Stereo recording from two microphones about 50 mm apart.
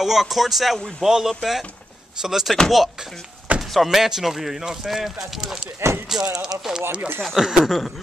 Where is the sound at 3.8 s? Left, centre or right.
Centre.